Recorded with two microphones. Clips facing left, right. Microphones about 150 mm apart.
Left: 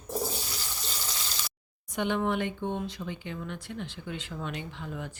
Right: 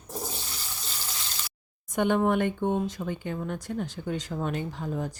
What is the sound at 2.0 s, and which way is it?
Speech, 45° right (ahead or behind).